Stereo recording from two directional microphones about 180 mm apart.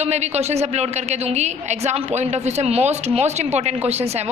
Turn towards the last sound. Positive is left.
turn(degrees=-35)  # may be behind; listen again after turning